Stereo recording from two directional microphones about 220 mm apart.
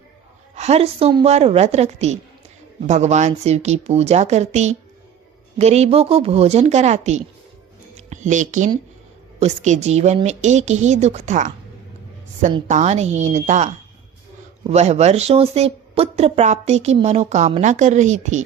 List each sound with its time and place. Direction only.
0.5 s speech: 30° right (ahead or behind)
7.9 s music: 35° right (ahead or behind)
9.4 s speech: 30° right (ahead or behind)